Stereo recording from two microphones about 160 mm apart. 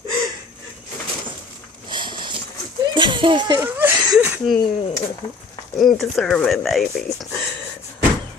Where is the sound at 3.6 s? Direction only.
10° right (ahead or behind).